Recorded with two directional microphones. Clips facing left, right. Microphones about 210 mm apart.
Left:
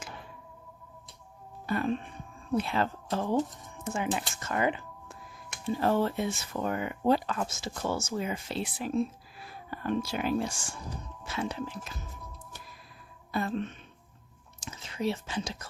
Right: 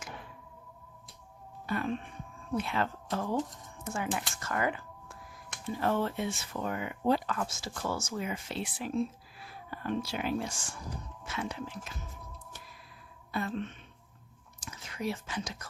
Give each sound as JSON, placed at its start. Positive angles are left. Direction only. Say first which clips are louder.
{"t": 1.6, "sound": "music", "louder": "left 3 dB", "side_deg": 35}
{"t": 2.6, "sound": "speech", "louder": "left 3 dB", "side_deg": 30}
{"t": 5.6, "sound": "speech", "louder": "left 4 dB", "side_deg": 30}
{"t": 7.3, "sound": "speech", "louder": "left 2 dB", "side_deg": 25}
{"t": 13.3, "sound": "speech", "louder": "left 3 dB", "side_deg": 40}
{"t": 14.6, "sound": "speech", "louder": "left 4 dB", "side_deg": 25}